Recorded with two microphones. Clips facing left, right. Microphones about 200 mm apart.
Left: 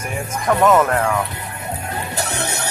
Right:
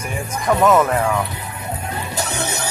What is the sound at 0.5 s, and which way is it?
Speech, 5° right (ahead or behind).